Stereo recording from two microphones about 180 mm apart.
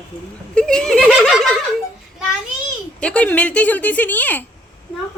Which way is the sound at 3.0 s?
10° left (ahead or behind).